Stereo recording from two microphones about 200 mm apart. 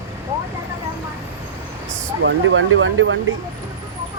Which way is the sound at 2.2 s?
70° right (ahead or behind).